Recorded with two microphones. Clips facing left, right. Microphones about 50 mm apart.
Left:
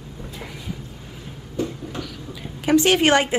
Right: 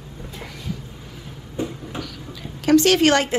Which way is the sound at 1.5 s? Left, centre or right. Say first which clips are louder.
Left 1 dB; centre.